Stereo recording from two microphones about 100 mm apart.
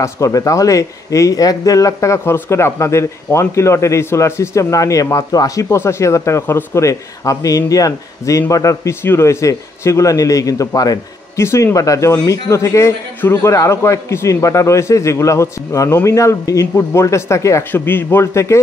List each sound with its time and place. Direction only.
0.0 s speech: 35° left (ahead or behind)
17.6 s a man's voice: 20° left (ahead or behind)